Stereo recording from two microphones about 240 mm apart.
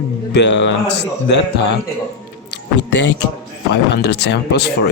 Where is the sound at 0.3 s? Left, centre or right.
Left.